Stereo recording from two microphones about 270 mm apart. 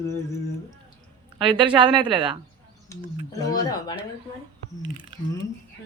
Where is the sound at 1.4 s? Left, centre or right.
Centre.